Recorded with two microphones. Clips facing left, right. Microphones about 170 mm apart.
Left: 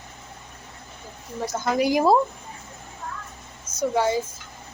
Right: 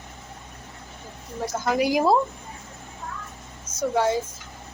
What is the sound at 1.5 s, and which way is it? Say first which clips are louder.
Speech: left 1 dB; centre (ahead or behind).